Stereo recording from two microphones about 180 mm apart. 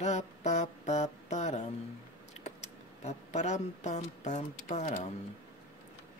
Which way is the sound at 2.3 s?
40° left (ahead or behind).